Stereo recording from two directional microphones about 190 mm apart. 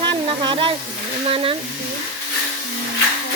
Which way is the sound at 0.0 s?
25° right (ahead or behind).